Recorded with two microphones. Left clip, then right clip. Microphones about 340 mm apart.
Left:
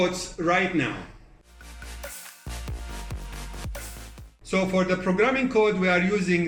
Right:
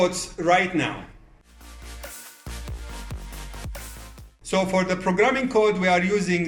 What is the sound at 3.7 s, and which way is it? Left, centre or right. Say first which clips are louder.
Music: left 1 dB; centre.